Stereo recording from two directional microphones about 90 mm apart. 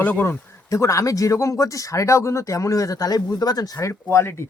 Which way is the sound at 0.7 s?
35° left (ahead or behind).